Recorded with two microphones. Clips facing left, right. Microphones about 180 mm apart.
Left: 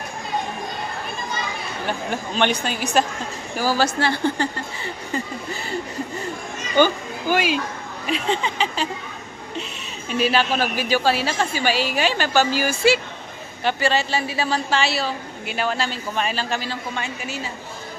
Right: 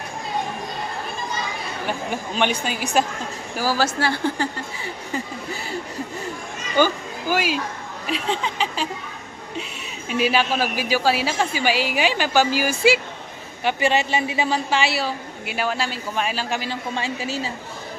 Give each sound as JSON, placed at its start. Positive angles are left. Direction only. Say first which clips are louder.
{"t": 1.9, "sound": "a woman's voice", "louder": "left 1 dB", "side_deg": -10}
{"t": 6.7, "sound": "speech", "louder": "left 2 dB", "side_deg": -5}
{"t": 10.1, "sound": "a woman's voice", "louder": "even", "side_deg": -10}
{"t": 16.9, "sound": "a woman's voice", "louder": "right 3 dB", "side_deg": -30}